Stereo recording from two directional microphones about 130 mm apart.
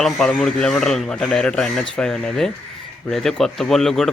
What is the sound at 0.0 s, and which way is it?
Speech, 5° left (ahead or behind).